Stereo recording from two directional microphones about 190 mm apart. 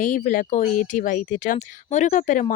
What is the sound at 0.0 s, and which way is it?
Speech, 45° left (ahead or behind).